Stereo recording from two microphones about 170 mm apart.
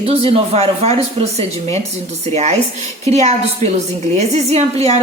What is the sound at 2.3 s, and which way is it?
A woman's voice, 40° right (ahead or behind).